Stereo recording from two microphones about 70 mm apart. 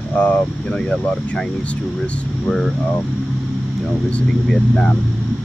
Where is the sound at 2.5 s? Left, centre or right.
Centre.